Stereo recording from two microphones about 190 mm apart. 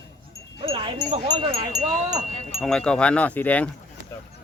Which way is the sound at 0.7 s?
30° right (ahead or behind).